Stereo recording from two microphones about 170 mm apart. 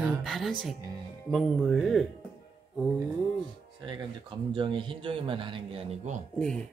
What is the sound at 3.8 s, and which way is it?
Speech, 25° right (ahead or behind).